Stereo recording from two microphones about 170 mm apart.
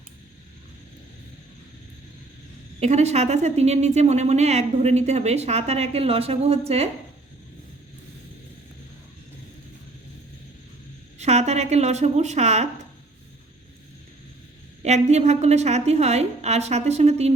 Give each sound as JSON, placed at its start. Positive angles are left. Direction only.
{"t": 2.8, "sound": "a woman's voice", "side_deg": -40}
{"t": 11.2, "sound": "a woman's voice", "side_deg": -40}
{"t": 14.8, "sound": "a woman's voice", "side_deg": -40}